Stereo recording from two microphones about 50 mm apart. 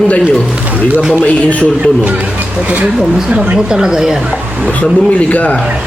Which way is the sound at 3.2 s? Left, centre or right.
Right.